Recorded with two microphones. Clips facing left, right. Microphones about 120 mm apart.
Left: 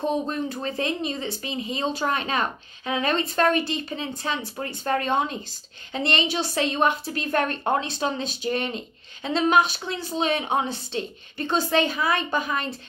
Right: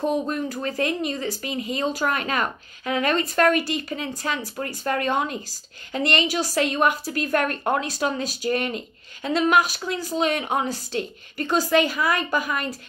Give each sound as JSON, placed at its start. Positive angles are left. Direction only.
{"t": 0.1, "sound": "speech", "side_deg": 30}